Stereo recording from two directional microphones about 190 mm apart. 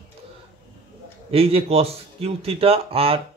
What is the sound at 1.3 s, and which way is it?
A man's voice, 30° right (ahead or behind).